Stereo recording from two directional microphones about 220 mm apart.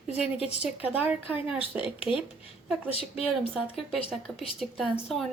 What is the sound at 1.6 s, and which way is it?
Speech, 25° left (ahead or behind).